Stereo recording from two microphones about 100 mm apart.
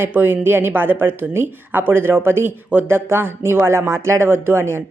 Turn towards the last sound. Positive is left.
turn(degrees=-25)  # may be behind; listen again after turning